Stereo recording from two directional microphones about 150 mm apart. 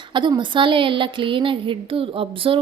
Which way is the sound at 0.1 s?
30° right (ahead or behind).